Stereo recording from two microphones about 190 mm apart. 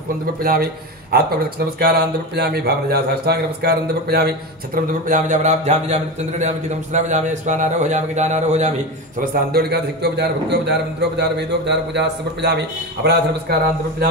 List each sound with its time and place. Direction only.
0.4 s a man's voice: 50° right (ahead or behind)
5.0 s a man's voice: 40° right (ahead or behind)
9.2 s a man's voice: 50° right (ahead or behind)